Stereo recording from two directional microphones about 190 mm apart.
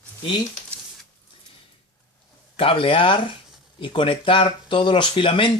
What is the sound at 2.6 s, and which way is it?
Speech, 30° left (ahead or behind).